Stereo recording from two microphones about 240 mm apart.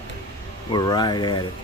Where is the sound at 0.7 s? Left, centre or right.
Centre.